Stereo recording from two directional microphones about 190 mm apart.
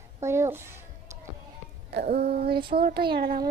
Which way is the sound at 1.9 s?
55° right (ahead or behind).